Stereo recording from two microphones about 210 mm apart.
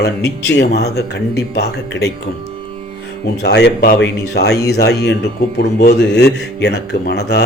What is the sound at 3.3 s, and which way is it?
Speech, 50° left (ahead or behind).